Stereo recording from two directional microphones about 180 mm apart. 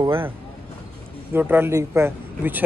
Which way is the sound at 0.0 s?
15° right (ahead or behind).